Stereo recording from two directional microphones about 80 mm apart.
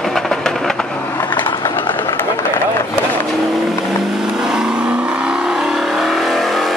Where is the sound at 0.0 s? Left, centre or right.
Centre.